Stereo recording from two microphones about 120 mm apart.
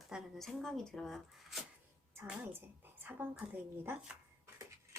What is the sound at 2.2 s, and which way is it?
A woman's voice, 15° right (ahead or behind).